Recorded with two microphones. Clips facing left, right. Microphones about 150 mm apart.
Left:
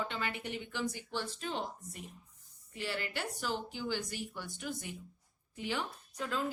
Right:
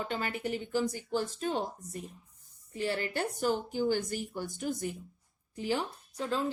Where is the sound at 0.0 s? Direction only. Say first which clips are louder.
Right 4 dB; 40° right (ahead or behind).